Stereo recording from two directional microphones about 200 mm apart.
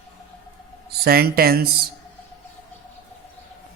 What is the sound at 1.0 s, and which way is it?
Speech, 50° right (ahead or behind).